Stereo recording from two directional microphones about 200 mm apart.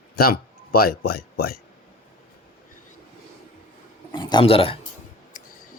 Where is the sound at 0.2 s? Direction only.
50° left (ahead or behind).